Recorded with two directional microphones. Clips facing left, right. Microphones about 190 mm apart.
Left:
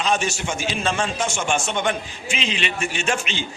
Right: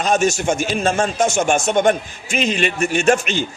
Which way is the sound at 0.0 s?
45° right (ahead or behind).